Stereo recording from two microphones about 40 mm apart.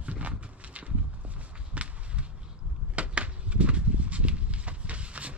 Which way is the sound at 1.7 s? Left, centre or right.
Right.